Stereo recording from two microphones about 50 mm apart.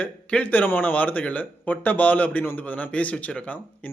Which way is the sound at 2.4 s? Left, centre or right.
Left.